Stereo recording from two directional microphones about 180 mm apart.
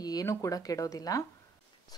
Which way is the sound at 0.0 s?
20° left (ahead or behind).